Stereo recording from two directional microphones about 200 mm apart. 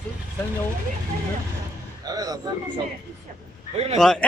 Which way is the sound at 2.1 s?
20° right (ahead or behind).